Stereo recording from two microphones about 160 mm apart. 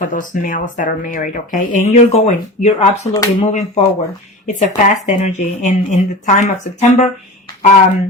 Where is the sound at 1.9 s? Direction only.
45° left (ahead or behind).